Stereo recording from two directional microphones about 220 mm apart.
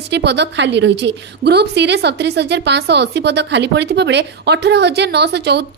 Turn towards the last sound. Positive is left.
turn(degrees=-50)  # may be behind; listen again after turning